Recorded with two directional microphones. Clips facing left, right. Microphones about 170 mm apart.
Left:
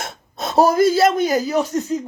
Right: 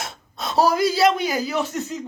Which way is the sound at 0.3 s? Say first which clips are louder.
Left 4 dB; 50° left (ahead or behind).